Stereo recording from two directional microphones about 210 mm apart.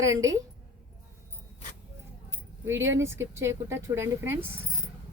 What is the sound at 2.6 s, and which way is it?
A woman's voice, 10° right (ahead or behind).